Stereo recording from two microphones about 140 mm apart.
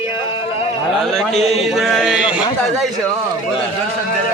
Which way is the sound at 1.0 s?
5° left (ahead or behind).